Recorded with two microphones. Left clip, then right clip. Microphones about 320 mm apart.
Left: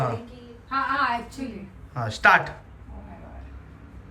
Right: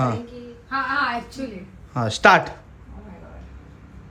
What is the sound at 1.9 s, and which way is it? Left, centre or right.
Speech, centre.